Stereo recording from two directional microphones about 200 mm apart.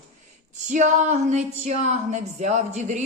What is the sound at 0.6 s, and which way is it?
Speech, 40° right (ahead or behind).